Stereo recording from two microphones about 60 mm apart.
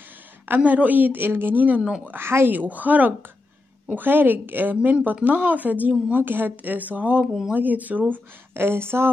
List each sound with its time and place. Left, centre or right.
0.5 s a woman's voice: right
1.8 s speech: centre
2.0 s a woman's voice: right
8.5 s a woman's voice: right